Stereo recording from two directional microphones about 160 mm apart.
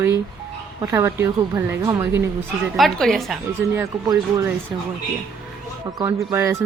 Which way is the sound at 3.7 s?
20° right (ahead or behind).